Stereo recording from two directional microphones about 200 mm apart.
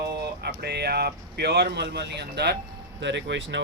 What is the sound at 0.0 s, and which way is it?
Speech, 55° right (ahead or behind).